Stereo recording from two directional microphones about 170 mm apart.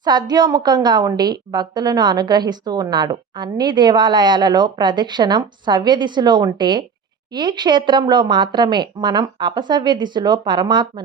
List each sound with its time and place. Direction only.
0.0 s a woman's voice: 25° right (ahead or behind)